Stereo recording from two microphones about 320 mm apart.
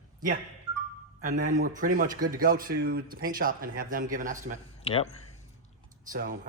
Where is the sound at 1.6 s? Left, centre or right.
Right.